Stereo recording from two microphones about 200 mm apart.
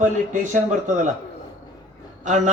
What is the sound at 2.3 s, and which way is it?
Speech, 35° right (ahead or behind).